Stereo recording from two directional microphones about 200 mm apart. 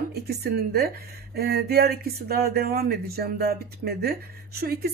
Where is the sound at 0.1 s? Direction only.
55° right (ahead or behind).